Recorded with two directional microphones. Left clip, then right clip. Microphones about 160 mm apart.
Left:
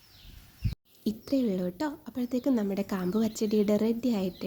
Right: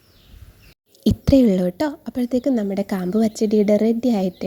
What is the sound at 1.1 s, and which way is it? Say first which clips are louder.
A woman's voice: right 14 dB; 50° right (ahead or behind).